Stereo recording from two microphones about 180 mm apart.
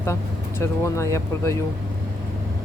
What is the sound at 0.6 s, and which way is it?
Speech, 15° left (ahead or behind).